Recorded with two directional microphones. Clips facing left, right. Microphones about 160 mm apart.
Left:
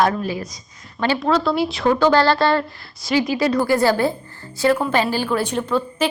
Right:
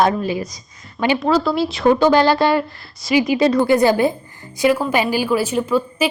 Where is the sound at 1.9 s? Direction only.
15° right (ahead or behind).